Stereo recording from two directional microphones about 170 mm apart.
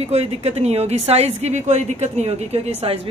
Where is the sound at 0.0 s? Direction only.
40° right (ahead or behind).